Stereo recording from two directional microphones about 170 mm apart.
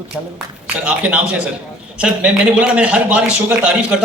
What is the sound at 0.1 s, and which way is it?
A man's voice, 5° right (ahead or behind).